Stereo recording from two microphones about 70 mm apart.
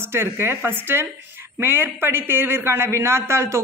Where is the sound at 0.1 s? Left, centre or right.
Right.